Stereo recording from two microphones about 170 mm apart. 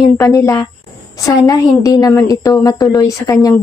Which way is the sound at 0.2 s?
20° left (ahead or behind).